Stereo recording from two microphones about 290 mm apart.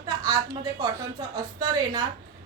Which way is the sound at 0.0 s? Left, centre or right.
Centre.